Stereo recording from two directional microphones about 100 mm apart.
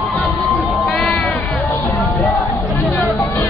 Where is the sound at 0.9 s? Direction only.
5° left (ahead or behind).